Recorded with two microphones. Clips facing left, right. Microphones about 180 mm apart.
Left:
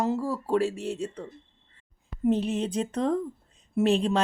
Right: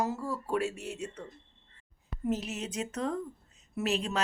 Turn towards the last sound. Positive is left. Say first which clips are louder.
# left 8 dB
turn(degrees=30)  # may be behind; listen again after turning